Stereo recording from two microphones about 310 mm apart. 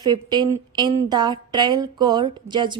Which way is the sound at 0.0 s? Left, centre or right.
Centre.